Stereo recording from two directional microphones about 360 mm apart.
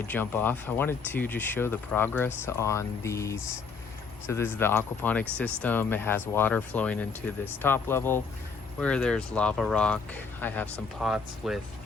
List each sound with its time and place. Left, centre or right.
0.1 s speech: centre